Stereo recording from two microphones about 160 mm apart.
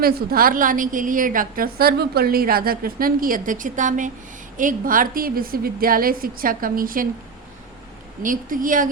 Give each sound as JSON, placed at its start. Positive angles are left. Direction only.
{"t": 0.0, "sound": "a woman's voice", "side_deg": -70}
{"t": 8.2, "sound": "a woman's voice", "side_deg": -55}